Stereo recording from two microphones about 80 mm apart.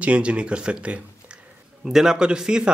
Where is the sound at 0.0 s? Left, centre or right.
Centre.